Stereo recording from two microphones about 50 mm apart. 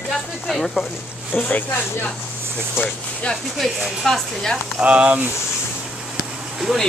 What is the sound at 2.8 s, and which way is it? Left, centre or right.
Speech, left.